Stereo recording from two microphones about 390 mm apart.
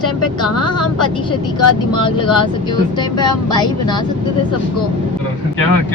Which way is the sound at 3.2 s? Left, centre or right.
Centre.